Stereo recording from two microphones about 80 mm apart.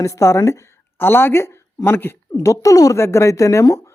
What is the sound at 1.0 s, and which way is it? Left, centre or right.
Speech, left.